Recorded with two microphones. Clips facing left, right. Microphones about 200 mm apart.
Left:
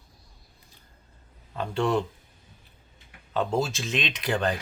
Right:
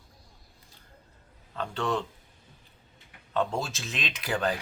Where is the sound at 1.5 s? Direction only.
10° left (ahead or behind).